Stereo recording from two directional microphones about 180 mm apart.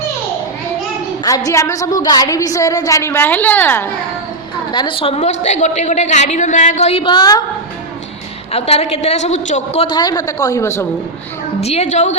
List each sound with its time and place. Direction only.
1.5 s a woman's voice: 15° left (ahead or behind)
4.7 s a woman's voice: 25° left (ahead or behind)
8.5 s a woman's voice: 35° left (ahead or behind)
9.9 s a woman's voice: 20° left (ahead or behind)
11.6 s a woman's voice: 35° left (ahead or behind)